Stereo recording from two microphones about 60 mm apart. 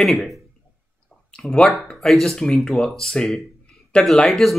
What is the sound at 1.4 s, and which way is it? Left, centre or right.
Speech, centre.